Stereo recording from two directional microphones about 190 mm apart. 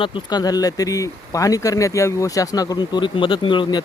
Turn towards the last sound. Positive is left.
turn(degrees=25)  # may be behind; listen again after turning